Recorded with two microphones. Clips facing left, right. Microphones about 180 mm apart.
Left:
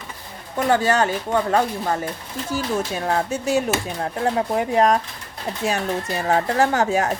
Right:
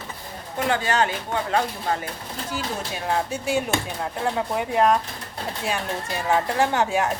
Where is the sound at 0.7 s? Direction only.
40° left (ahead or behind).